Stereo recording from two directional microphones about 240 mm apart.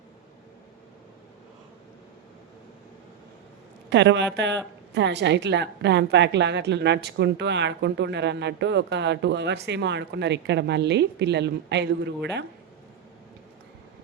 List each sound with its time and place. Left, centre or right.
3.8 s a woman's voice: right